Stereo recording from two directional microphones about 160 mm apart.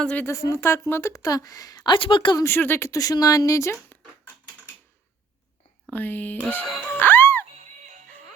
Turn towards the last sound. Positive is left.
turn(degrees=15)  # may be behind; listen again after turning